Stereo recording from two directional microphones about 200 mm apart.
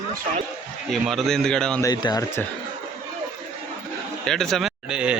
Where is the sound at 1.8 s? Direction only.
20° left (ahead or behind).